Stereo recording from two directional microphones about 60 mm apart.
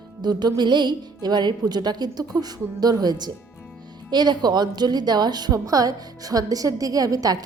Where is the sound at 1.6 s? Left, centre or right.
Right.